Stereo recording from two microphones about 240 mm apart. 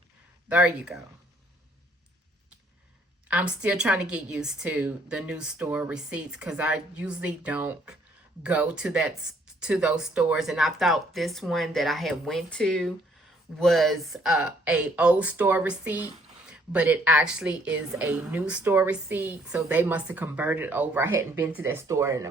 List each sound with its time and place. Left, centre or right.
0.4 s a woman's voice: centre
3.2 s a woman's voice: centre